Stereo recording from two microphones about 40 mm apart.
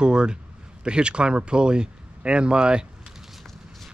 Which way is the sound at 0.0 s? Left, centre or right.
Right.